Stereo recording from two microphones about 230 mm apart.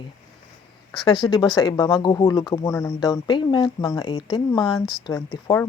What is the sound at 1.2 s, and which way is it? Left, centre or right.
Speech, centre.